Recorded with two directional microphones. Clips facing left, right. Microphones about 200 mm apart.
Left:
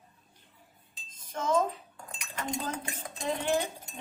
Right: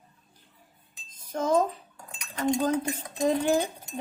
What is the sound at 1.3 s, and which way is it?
Dishes, 35° right (ahead or behind).